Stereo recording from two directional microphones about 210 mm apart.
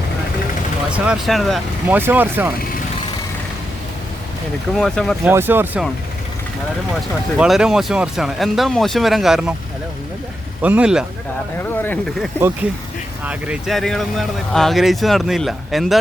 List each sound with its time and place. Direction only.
0.9 s speech: 5° right (ahead or behind)
4.8 s speech: centre (ahead or behind)
5.3 s speech: 10° right (ahead or behind)
7.3 s speech: 5° right (ahead or behind)
10.6 s speech: 5° right (ahead or behind)
11.5 s speech: 10° left (ahead or behind)
13.2 s speech: 5° right (ahead or behind)